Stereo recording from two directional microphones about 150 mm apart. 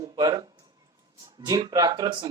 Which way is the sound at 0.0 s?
25° right (ahead or behind).